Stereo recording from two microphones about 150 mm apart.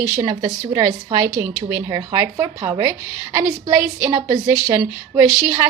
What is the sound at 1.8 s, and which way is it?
A woman's voice, 25° right (ahead or behind).